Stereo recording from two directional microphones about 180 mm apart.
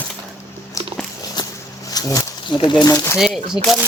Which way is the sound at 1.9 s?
20° left (ahead or behind).